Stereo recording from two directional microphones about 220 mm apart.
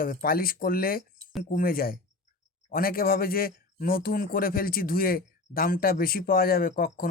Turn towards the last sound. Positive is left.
turn(degrees=40)  # may be behind; listen again after turning